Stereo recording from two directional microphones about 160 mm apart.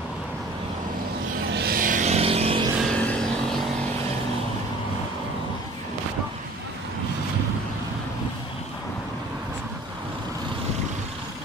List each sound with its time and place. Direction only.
1.5 s vehicle: 80° right; by 2.7 s 35° right (ahead or behind)
2.8 s vehicle: 5° left (ahead or behind)